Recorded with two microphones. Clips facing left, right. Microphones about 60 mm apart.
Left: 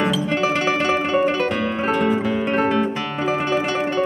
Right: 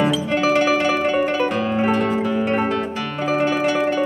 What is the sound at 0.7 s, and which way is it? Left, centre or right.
Music, centre.